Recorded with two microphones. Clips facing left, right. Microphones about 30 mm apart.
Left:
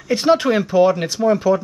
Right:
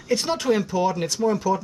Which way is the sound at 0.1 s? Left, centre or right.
Left.